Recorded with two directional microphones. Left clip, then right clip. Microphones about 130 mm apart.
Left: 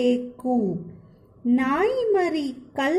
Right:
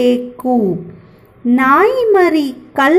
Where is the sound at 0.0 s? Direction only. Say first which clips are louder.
Right 9 dB; 5° left (ahead or behind).